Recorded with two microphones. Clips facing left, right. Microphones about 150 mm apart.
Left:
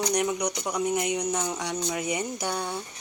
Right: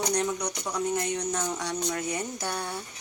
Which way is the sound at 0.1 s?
10° left (ahead or behind).